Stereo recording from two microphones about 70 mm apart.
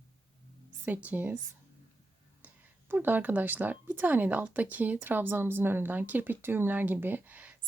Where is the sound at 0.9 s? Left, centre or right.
Right.